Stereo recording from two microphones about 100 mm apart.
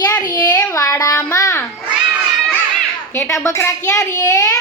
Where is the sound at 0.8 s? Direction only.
35° left (ahead or behind).